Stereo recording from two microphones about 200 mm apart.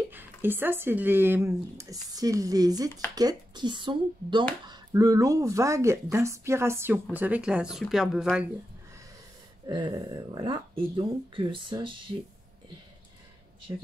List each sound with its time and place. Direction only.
0.1 s speech: 10° right (ahead or behind)
9.7 s speech: 25° right (ahead or behind)
13.7 s speech: 15° right (ahead or behind)